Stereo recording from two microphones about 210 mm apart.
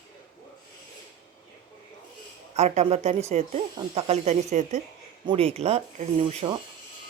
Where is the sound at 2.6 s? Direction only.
30° right (ahead or behind).